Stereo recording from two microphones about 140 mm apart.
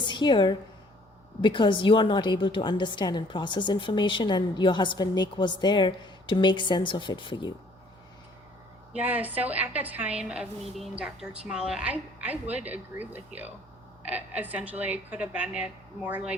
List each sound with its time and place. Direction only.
0.0 s a woman's voice: 35° left (ahead or behind)
8.9 s a woman's voice: 10° right (ahead or behind)